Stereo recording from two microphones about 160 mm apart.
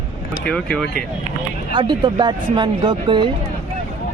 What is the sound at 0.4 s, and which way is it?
Speech, 5° left (ahead or behind).